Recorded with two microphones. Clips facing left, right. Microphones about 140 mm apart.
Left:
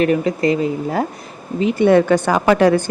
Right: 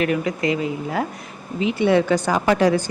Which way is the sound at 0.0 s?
35° left (ahead or behind).